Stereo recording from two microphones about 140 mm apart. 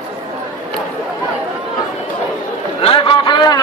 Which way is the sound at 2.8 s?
40° left (ahead or behind).